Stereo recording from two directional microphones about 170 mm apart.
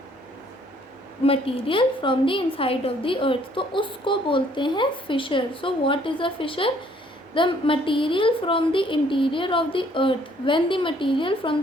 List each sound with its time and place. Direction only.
1.2 s a woman's voice: 35° left (ahead or behind)